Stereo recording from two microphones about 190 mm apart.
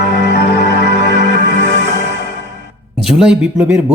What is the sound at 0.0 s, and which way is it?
Music, 45° left (ahead or behind).